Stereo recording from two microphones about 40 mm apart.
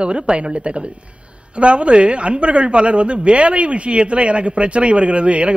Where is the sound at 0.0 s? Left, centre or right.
Right.